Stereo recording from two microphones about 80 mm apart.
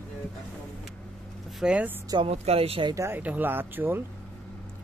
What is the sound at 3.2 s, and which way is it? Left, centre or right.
Speech, right.